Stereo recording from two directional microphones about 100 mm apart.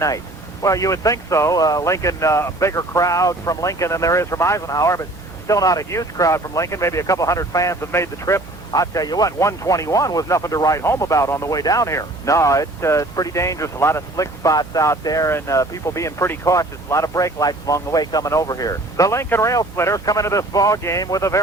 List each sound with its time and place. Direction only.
0.6 s speech: 35° left (ahead or behind)